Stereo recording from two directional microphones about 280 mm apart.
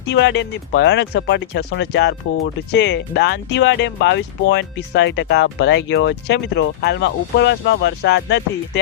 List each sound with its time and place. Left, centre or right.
0.1 s speech: left